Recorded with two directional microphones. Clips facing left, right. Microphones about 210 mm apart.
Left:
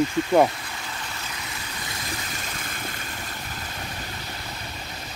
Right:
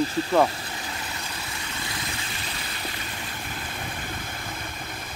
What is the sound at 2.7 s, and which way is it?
Vehicle, 50° left (ahead or behind).